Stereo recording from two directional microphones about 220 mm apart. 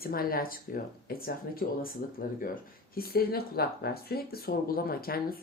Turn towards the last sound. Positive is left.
turn(degrees=45)  # may be behind; listen again after turning